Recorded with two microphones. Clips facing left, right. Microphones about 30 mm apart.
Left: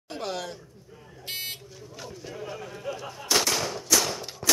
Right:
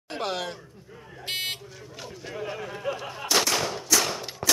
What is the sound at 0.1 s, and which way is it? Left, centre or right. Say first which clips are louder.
Buzzer: right 3 dB; right.